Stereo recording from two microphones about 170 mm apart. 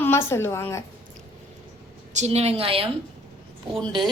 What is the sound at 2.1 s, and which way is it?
Speech, 40° right (ahead or behind).